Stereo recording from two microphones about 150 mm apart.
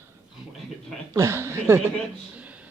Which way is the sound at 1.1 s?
20° right (ahead or behind).